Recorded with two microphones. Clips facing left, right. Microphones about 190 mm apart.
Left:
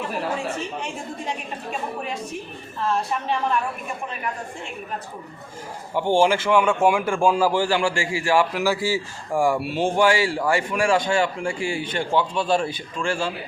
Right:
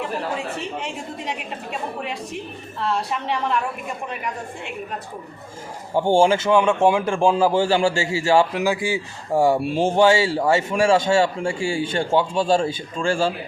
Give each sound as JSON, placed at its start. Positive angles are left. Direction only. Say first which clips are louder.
{"t": 5.9, "sound": "a man's voice", "louder": "right 2 dB", "side_deg": -30}